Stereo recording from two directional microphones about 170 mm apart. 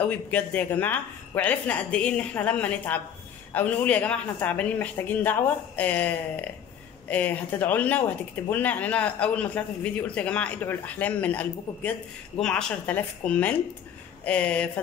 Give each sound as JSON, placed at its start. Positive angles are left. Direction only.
{"t": 0.0, "sound": "speech", "side_deg": 10}